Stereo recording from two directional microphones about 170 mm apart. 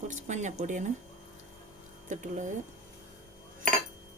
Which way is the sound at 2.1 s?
50° right (ahead or behind).